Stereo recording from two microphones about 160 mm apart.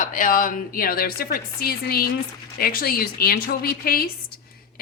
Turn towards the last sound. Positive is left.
turn(degrees=70)  # may be behind; listen again after turning